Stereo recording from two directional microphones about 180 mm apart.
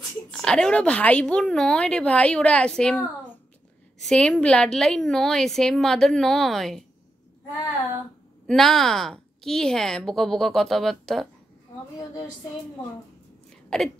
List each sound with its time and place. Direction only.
0.3 s a woman's voice: 5° left (ahead or behind)
8.5 s a woman's voice: centre (ahead or behind)
13.7 s a woman's voice: 5° left (ahead or behind)